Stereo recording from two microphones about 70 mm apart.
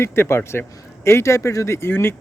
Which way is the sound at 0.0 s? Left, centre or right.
Left.